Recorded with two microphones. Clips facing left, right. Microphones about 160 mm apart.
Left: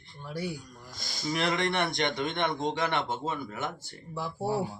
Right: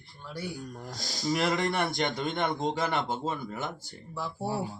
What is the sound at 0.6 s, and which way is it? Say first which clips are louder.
Speech: right 7 dB; 55° right (ahead or behind).